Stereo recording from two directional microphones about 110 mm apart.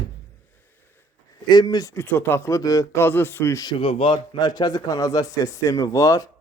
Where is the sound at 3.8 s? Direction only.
55° left (ahead or behind); by 6.3 s 30° left (ahead or behind).